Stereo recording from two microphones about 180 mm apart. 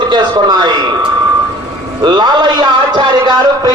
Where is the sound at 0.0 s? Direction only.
25° right (ahead or behind).